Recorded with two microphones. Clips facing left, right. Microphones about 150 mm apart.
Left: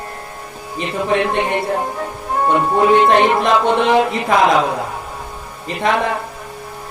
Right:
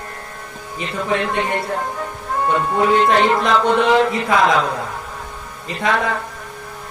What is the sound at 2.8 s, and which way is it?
Speech, 20° left (ahead or behind).